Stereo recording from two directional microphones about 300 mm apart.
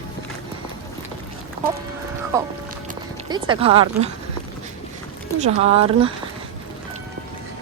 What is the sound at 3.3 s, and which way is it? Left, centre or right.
Speech, centre.